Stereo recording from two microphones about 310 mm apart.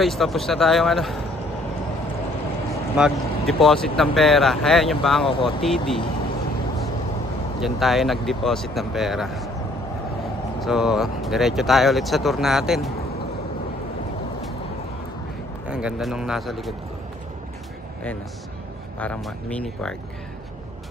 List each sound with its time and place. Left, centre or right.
0.0 s speech: centre
3.0 s speech: centre
5.2 s speech: centre
5.6 s speech: centre
7.6 s speech: centre
10.6 s speech: centre
15.7 s speech: centre
18.9 s speech: centre